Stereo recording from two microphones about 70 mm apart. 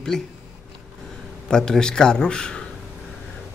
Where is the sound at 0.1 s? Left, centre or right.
Centre.